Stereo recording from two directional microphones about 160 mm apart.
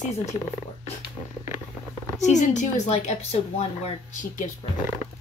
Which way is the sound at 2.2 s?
45° left (ahead or behind).